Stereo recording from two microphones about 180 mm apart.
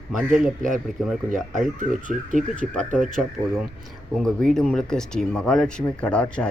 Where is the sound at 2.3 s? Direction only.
45° right (ahead or behind).